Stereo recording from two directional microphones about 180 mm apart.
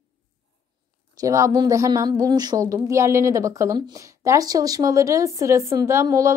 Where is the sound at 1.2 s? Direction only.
15° right (ahead or behind).